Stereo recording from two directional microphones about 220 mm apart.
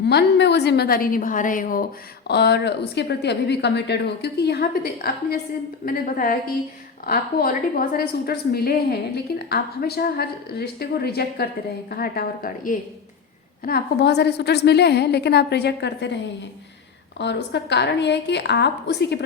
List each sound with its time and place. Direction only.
0.0 s a woman's voice: 50° left (ahead or behind)
17.2 s a woman's voice: 50° left (ahead or behind)